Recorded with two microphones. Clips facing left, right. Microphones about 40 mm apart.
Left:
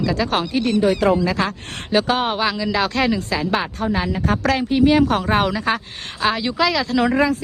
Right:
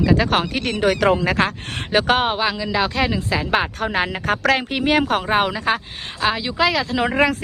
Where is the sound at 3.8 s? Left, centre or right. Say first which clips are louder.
Even; right.